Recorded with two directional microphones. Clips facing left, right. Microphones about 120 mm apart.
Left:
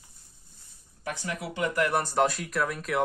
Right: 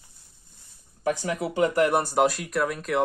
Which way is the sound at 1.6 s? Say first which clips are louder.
Right 5 dB; 30° right (ahead or behind).